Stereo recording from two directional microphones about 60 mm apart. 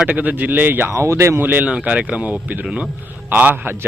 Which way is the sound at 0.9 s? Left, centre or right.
Right.